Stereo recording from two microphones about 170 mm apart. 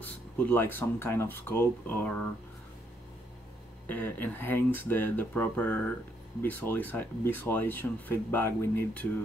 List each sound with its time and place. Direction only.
0.0 s speech: 10° left (ahead or behind)
3.9 s speech: 10° left (ahead or behind)